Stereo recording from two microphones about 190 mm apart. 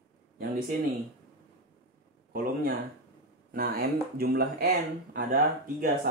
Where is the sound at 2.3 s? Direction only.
50° right (ahead or behind).